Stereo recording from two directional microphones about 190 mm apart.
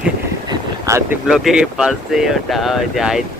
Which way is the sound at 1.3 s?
5° right (ahead or behind).